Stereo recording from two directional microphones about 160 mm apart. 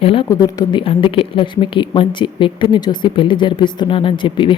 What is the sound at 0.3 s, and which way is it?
A woman's voice, 25° left (ahead or behind).